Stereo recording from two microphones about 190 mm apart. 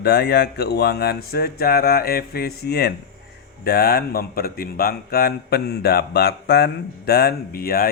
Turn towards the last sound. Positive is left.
turn(degrees=50)  # may be behind; listen again after turning